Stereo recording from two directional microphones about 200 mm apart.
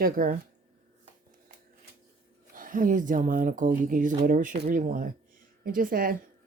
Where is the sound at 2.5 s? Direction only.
40° right (ahead or behind).